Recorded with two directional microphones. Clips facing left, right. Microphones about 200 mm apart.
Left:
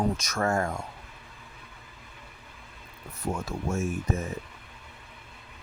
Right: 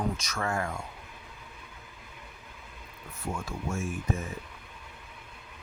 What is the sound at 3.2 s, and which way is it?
Speech, 40° left (ahead or behind).